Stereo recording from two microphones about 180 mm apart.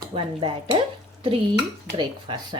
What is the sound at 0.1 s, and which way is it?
Speech, 30° right (ahead or behind).